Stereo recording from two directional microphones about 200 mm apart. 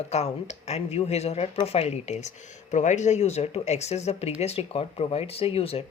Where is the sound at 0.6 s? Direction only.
30° left (ahead or behind).